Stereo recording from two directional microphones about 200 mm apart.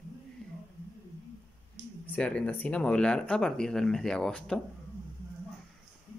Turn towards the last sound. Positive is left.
turn(degrees=5)  # may be behind; listen again after turning